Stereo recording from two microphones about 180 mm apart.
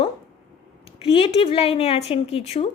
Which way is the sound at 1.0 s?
30° left (ahead or behind).